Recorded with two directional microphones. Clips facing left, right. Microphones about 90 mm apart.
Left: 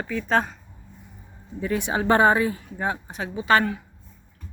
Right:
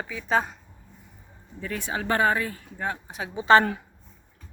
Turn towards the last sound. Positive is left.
turn(degrees=-30)  # may be behind; listen again after turning